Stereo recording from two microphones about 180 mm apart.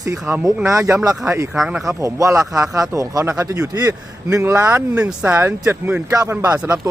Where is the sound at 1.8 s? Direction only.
20° right (ahead or behind).